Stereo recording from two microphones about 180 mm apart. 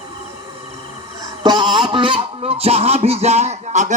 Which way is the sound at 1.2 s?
20° right (ahead or behind).